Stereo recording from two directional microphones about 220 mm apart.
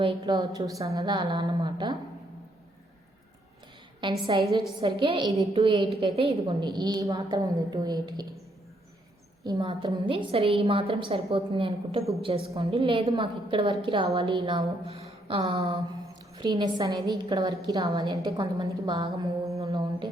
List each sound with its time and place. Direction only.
0.0 s a woman's voice: 20° right (ahead or behind)
4.3 s a woman's voice: 20° right (ahead or behind)
9.4 s a woman's voice: 20° right (ahead or behind)